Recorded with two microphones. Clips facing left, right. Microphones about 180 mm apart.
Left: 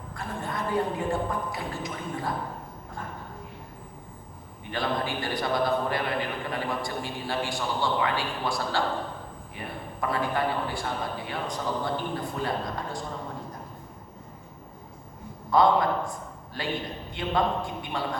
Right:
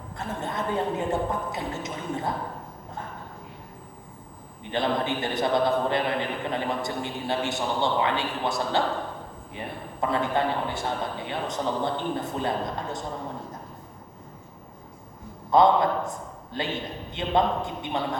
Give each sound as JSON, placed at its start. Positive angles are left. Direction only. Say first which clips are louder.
{"t": 0.2, "sound": "a man's voice", "louder": "right 2 dB", "side_deg": -20}
{"t": 4.7, "sound": "a man's voice", "louder": "right 3 dB", "side_deg": -20}
{"t": 15.5, "sound": "a man's voice", "louder": "right 2 dB", "side_deg": -20}